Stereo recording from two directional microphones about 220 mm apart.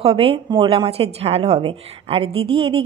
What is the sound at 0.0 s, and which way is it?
A woman's voice, 25° right (ahead or behind).